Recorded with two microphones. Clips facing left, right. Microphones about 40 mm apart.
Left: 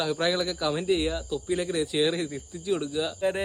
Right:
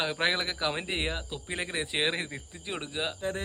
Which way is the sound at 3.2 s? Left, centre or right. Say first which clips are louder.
Left 6 dB; left.